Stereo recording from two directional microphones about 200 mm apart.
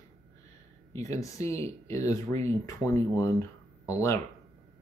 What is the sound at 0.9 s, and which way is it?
Speech, 15° left (ahead or behind).